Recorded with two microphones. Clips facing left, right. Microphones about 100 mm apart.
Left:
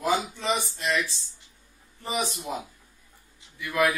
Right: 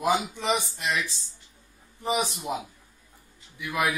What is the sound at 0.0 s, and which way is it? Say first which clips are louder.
Speech: right 1 dB; 15° right (ahead or behind).